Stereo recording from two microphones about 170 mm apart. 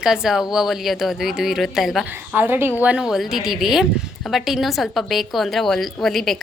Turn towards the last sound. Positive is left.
turn(degrees=0)  # may be behind; listen again after turning